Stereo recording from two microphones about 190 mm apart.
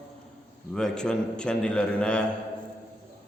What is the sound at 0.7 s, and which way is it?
A man's voice, 5° left (ahead or behind).